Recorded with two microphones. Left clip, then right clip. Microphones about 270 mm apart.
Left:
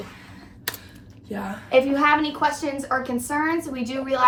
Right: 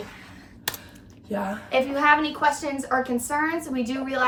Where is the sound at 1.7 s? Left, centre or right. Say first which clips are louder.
Left 2 dB; centre.